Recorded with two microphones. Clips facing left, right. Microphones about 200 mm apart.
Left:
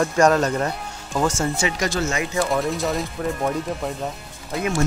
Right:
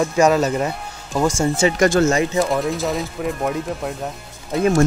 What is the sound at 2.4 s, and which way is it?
Speech, centre (ahead or behind).